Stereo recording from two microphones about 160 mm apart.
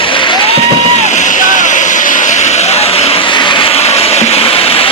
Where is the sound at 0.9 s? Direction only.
45° left (ahead or behind).